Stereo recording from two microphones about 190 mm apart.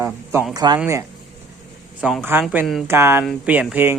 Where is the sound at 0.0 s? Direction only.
15° right (ahead or behind).